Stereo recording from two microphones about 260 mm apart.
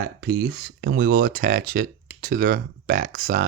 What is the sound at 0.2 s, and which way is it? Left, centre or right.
Speech, right.